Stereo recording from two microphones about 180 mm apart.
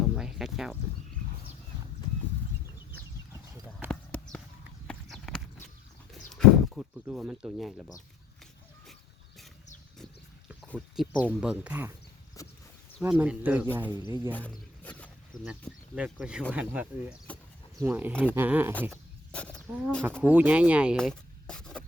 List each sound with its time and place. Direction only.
0.2 s a sound: centre (ahead or behind)
3.8 s clip-clop: 5° left (ahead or behind)
6.3 s speech: centre (ahead or behind)
10.7 s speech: centre (ahead or behind)
12.4 s a sound: 20° left (ahead or behind)
13.0 s speech: 10° right (ahead or behind)
14.3 s a sound: 10° left (ahead or behind)
16.0 s speech: 5° right (ahead or behind)
19.3 s wild animals: 5° left (ahead or behind)
20.2 s speech: 10° right (ahead or behind)
20.9 s rub: 5° left (ahead or behind)